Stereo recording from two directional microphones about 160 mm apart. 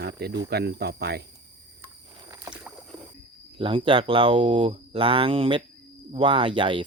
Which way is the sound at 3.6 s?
35° right (ahead or behind).